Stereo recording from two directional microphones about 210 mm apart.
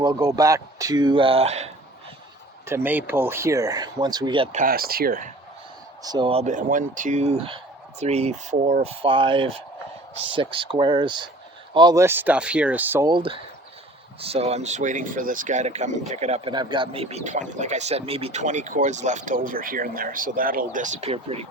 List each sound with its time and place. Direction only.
0.0 s speech: 15° right (ahead or behind)
2.6 s speech: 10° right (ahead or behind)
4.5 s speech: 45° right (ahead or behind)
6.0 s speech: 20° right (ahead or behind)
13.1 s speech: 25° right (ahead or behind)